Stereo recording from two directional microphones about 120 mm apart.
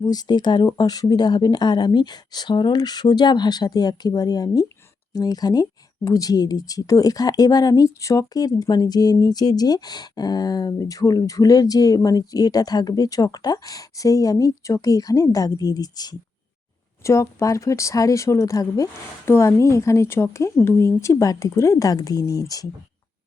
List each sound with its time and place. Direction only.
0.0 s speech: 35° left (ahead or behind)